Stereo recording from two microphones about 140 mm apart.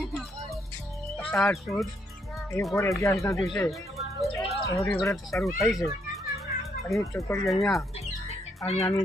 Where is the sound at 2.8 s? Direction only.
20° left (ahead or behind).